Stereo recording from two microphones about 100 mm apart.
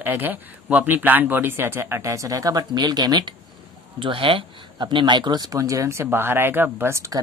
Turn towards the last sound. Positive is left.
turn(degrees=-30)  # may be behind; listen again after turning